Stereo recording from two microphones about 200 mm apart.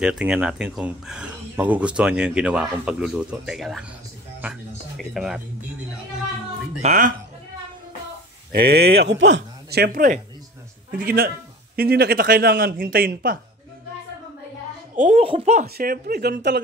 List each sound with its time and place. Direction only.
0.0 s speech: 5° right (ahead or behind)
6.8 s a child's voice: 40° right (ahead or behind)
8.5 s a man's voice: 50° right (ahead or behind)
15.0 s a child's voice: 35° right (ahead or behind)
15.6 s a man's voice: 50° right (ahead or behind)